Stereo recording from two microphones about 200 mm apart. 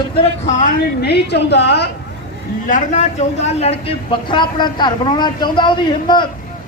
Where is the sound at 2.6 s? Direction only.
40° left (ahead or behind).